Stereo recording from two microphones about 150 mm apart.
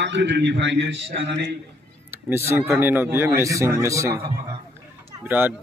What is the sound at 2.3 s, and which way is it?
Speech, 15° right (ahead or behind).